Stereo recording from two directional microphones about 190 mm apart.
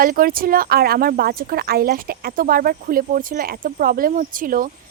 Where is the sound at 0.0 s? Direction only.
50° right (ahead or behind).